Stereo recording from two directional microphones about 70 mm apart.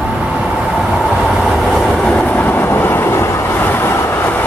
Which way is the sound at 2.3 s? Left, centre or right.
Left.